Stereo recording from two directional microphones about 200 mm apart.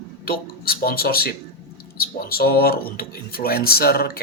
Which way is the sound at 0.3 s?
50° left (ahead or behind).